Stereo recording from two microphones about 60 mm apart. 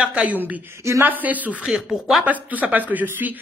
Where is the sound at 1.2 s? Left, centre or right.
Right.